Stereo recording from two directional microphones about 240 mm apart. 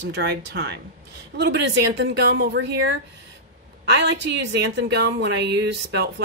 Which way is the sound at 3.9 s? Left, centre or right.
Right.